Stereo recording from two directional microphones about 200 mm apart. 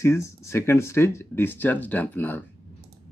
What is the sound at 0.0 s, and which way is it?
Speech, 15° left (ahead or behind).